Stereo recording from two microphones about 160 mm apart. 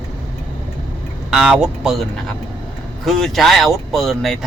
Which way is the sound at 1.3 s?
5° right (ahead or behind).